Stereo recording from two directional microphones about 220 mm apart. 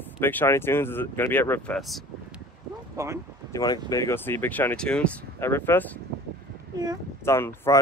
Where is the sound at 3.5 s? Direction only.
15° left (ahead or behind).